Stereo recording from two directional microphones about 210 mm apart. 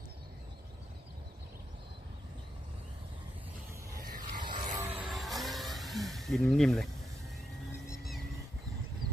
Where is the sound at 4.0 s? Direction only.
40° right (ahead or behind).